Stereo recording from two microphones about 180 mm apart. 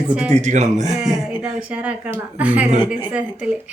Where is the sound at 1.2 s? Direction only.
5° right (ahead or behind).